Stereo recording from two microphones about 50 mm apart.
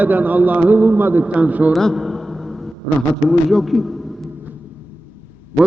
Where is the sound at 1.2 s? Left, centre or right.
Right.